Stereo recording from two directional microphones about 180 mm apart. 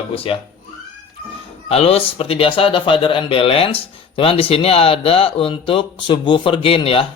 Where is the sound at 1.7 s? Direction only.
35° left (ahead or behind).